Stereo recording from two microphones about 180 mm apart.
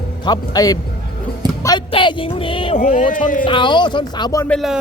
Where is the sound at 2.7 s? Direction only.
45° left (ahead or behind).